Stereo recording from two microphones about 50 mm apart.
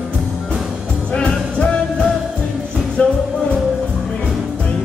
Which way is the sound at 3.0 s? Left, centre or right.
Left.